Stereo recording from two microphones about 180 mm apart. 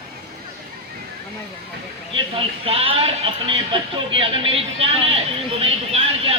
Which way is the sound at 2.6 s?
35° right (ahead or behind).